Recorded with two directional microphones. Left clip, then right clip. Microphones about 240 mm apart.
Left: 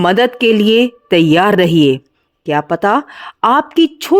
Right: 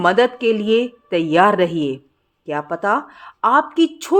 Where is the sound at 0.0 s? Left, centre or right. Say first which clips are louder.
Left 3 dB; left.